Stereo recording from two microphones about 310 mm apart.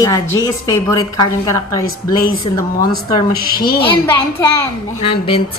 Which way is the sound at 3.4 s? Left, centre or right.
Left.